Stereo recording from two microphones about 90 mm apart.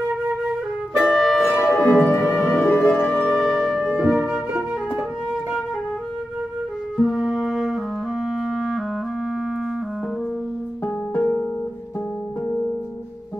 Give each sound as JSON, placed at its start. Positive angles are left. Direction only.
{"t": 0.9, "sound": "music", "side_deg": -5}
{"t": 1.8, "sound": "music", "side_deg": 20}
{"t": 7.0, "sound": "music", "side_deg": -5}
{"t": 8.4, "sound": "clarinet", "side_deg": 0}
{"t": 11.1, "sound": "music", "side_deg": 15}
{"t": 12.4, "sound": "music", "side_deg": 20}